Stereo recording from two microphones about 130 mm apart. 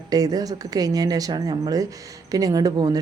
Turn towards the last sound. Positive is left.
turn(degrees=-30)  # may be behind; listen again after turning